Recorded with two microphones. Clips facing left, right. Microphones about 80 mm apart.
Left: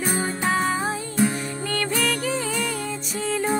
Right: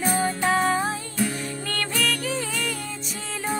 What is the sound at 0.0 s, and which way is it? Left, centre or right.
Music, centre.